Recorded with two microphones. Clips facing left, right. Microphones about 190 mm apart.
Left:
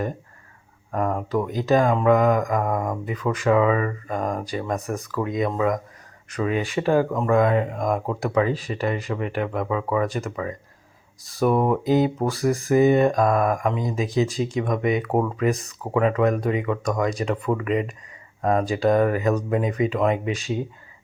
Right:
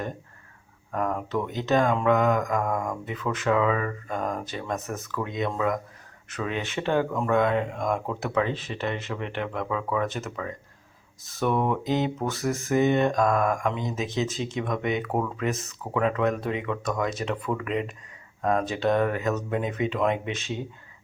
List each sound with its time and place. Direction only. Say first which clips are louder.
0.9 s speech: left 4 dB; centre (ahead or behind)
11.5 s speech: left 4 dB; 35° left (ahead or behind)
11.8 s speech: left 6 dB; 5° left (ahead or behind)